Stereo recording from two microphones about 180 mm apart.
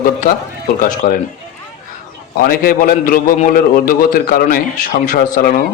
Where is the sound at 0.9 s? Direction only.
50° left (ahead or behind).